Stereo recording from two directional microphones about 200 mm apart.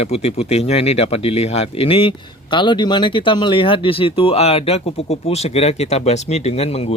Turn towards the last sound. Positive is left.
turn(degrees=30)  # may be behind; listen again after turning